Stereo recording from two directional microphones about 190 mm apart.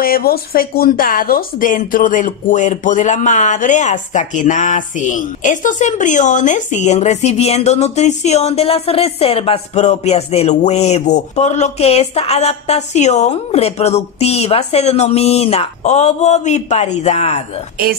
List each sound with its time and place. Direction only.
0.0 s speech: 50° left (ahead or behind); by 17.4 s 35° left (ahead or behind)